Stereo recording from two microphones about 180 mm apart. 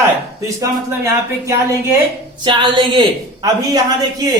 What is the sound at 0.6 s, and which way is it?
Speech, 15° right (ahead or behind).